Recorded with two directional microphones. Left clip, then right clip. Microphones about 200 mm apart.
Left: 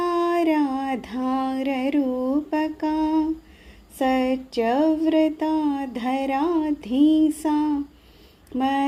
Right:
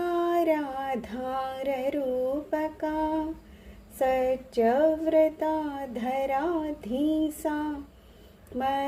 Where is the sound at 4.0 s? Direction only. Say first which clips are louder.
Left 3 dB; 25° left (ahead or behind).